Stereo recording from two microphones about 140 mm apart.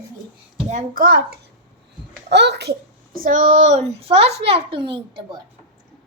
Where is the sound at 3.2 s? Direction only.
70° right (ahead or behind); by 5.4 s 35° right (ahead or behind).